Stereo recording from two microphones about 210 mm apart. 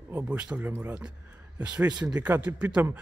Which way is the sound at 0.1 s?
10° right (ahead or behind).